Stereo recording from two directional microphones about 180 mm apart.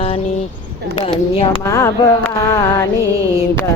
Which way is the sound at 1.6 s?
15° left (ahead or behind).